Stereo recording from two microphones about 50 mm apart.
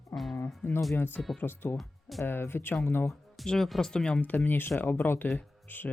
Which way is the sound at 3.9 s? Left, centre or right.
Centre.